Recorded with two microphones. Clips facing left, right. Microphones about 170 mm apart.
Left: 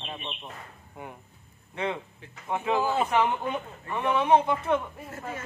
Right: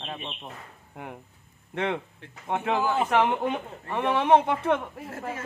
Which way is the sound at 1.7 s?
75° right (ahead or behind).